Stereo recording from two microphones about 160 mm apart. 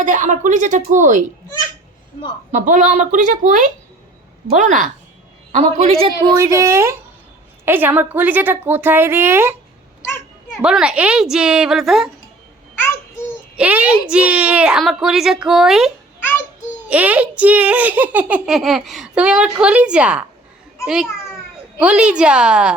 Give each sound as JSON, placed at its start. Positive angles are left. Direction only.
{"t": 0.0, "sound": "a woman's voice", "side_deg": -50}
{"t": 2.5, "sound": "a woman's voice", "side_deg": -50}
{"t": 6.2, "sound": "a woman's voice", "side_deg": -20}
{"t": 10.6, "sound": "a woman's voice", "side_deg": -5}
{"t": 12.8, "sound": "babbling", "side_deg": 15}
{"t": 13.6, "sound": "a woman's voice", "side_deg": -10}
{"t": 16.9, "sound": "a child's voice", "side_deg": -10}